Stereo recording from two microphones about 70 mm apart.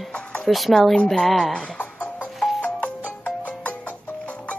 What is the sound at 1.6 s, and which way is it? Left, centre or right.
Music, centre.